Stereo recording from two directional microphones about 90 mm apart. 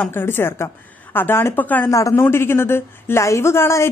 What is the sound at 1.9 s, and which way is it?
A woman's voice, 35° left (ahead or behind).